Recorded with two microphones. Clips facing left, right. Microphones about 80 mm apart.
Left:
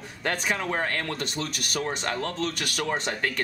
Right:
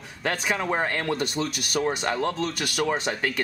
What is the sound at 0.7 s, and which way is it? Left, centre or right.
Speech, centre.